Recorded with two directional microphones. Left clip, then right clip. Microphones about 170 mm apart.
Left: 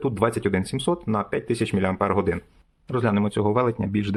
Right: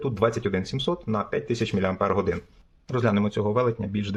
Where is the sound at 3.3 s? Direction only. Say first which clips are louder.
Left 2 dB; 20° left (ahead or behind).